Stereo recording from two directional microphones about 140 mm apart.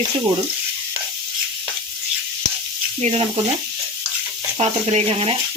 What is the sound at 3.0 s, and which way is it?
Stir, 45° right (ahead or behind).